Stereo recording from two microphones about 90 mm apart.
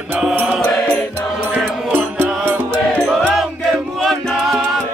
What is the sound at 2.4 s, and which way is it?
Music, 25° right (ahead or behind).